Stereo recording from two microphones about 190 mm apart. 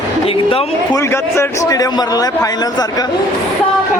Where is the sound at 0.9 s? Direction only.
15° left (ahead or behind).